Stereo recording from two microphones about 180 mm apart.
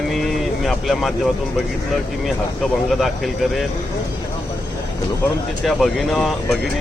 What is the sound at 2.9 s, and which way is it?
Speech, centre (ahead or behind).